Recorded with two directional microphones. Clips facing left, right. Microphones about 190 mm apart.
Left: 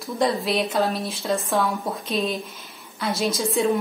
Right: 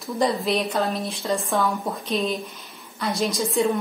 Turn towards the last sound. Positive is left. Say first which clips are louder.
# even
turn(degrees=0)  # may be behind; listen again after turning